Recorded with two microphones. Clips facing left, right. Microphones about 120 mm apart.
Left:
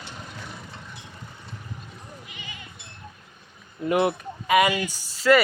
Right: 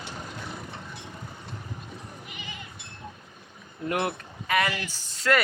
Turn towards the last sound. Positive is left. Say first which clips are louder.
# left 6 dB
turn(degrees=5)  # may be behind; listen again after turning